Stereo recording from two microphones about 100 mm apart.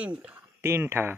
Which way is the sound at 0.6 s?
25° right (ahead or behind).